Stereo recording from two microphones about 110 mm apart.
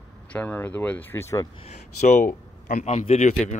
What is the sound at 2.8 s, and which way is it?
Speech, 85° left.